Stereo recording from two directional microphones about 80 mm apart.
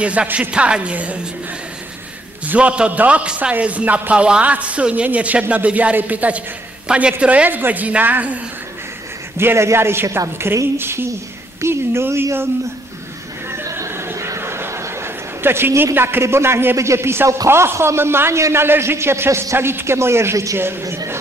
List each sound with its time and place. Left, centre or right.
0.0 s a man's voice: centre
2.4 s a man's voice: centre
9.4 s a woman's voice: right
13.7 s a sound: right
17.5 s a man's voice: right